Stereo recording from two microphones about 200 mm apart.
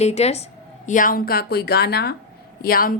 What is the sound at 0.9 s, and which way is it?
A woman's voice, 40° left (ahead or behind).